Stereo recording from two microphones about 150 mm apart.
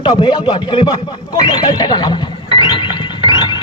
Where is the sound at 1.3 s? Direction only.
30° left (ahead or behind).